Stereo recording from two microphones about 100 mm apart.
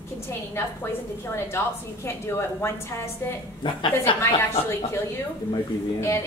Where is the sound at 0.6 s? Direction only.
25° left (ahead or behind).